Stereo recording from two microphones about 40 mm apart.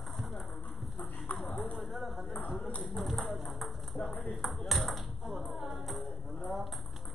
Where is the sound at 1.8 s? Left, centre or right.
Centre.